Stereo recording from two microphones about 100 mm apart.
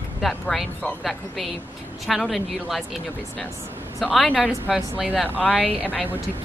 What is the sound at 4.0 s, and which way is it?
Speech, centre (ahead or behind).